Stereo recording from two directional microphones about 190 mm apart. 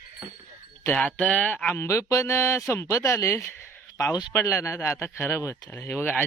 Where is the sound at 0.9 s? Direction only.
5° left (ahead or behind).